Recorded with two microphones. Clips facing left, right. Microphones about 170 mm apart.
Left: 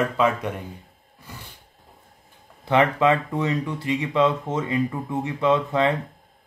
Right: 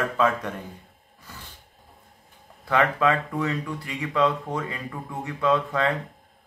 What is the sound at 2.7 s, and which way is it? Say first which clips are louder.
Speech: left 3 dB; 25° left (ahead or behind).